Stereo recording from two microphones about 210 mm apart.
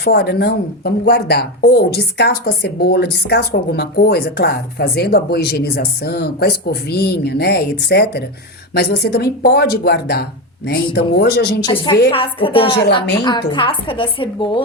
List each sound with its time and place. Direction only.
0.0 s speech: 50° left (ahead or behind)
11.6 s a woman's voice: 25° left (ahead or behind)